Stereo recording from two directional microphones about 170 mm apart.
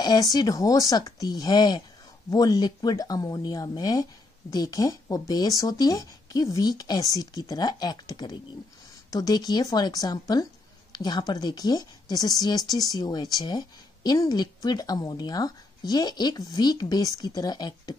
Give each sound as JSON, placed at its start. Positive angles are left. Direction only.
{"t": 0.0, "sound": "speech", "side_deg": 20}